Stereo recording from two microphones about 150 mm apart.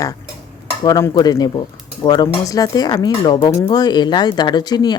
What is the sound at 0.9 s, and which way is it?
Speech, 25° left (ahead or behind).